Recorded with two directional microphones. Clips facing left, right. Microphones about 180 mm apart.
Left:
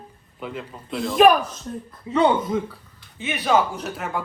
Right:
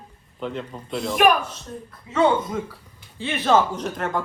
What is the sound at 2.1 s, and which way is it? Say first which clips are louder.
Speech: left 3 dB; 30° left (ahead or behind).